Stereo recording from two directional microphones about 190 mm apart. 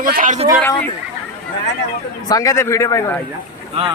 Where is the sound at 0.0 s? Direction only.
45° right (ahead or behind).